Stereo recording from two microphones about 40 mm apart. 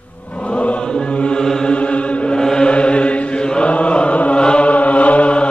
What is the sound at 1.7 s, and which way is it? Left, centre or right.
Chant, left.